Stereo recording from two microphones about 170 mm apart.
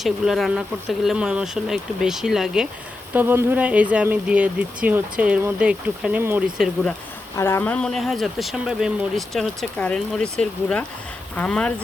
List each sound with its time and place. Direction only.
0.0 s speech: centre (ahead or behind)
7.3 s speech: 15° left (ahead or behind)